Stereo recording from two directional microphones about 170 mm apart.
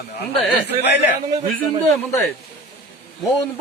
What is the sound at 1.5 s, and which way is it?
Speech, 10° left (ahead or behind).